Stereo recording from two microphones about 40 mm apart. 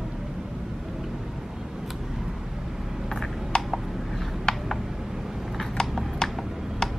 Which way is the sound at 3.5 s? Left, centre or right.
Centre.